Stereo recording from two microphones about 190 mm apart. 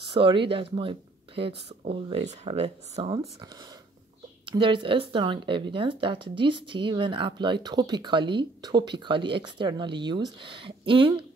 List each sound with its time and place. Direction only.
0.0 s speech: 25° right (ahead or behind)
4.5 s speech: 25° right (ahead or behind)